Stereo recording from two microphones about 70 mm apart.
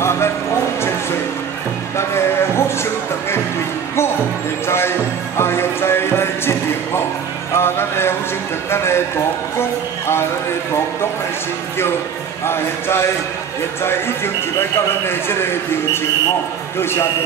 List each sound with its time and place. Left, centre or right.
0.0 s a sound: left
2.0 s music: left
4.6 s music: left
7.5 s a man's voice: left
12.4 s a man's voice: left